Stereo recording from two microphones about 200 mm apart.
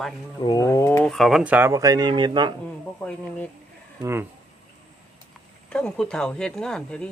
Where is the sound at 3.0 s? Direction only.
5° left (ahead or behind).